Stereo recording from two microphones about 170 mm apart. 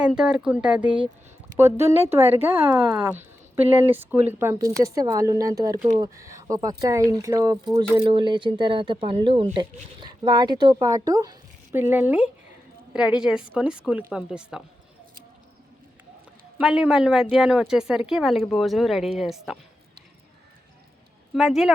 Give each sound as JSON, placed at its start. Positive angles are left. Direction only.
{"t": 0.2, "sound": "a woman's voice", "side_deg": -5}
{"t": 16.6, "sound": "a woman's voice", "side_deg": -5}
{"t": 21.3, "sound": "a woman's voice", "side_deg": 0}